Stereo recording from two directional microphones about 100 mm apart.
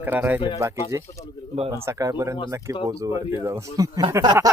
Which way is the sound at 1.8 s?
30° right (ahead or behind).